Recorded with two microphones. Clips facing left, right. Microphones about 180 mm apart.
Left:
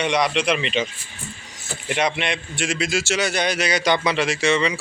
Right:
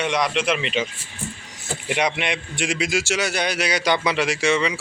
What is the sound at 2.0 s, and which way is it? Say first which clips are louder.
A man's voice: left 1 dB; 15° right (ahead or behind).